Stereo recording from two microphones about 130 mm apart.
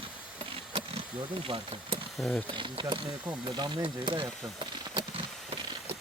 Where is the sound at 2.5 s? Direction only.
40° right (ahead or behind).